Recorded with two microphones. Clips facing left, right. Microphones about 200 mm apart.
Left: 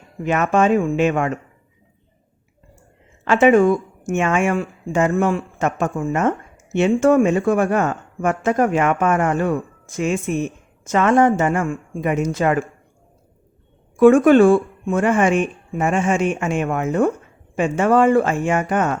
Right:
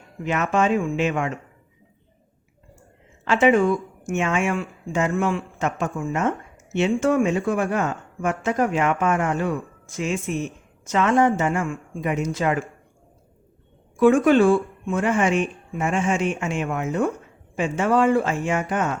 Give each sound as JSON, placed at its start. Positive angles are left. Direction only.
{"t": 0.3, "sound": "speech", "side_deg": 50}
{"t": 3.2, "sound": "speech", "side_deg": 50}
{"t": 14.0, "sound": "speech", "side_deg": 50}